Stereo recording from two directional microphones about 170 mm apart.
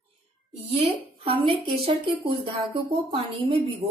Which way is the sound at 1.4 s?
35° right (ahead or behind).